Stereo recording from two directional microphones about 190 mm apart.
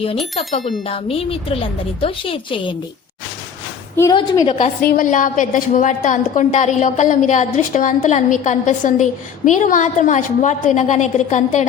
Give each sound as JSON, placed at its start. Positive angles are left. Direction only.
{"t": 0.4, "sound": "a woman's voice", "side_deg": 30}
{"t": 3.9, "sound": "a woman's voice", "side_deg": 15}
{"t": 4.5, "sound": "a woman's voice", "side_deg": 45}